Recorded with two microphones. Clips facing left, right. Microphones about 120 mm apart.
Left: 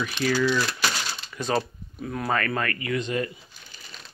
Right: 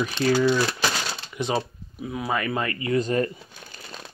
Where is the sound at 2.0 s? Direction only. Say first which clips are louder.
Even; 5° right (ahead or behind).